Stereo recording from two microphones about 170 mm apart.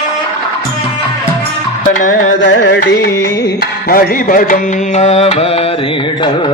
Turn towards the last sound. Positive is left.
turn(degrees=35)  # may be behind; listen again after turning